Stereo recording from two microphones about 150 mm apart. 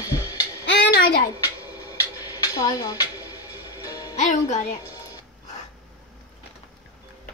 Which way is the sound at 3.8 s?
25° left (ahead or behind).